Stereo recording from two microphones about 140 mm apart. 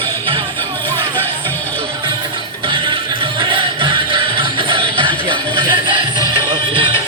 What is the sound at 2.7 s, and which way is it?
Music, 35° right (ahead or behind).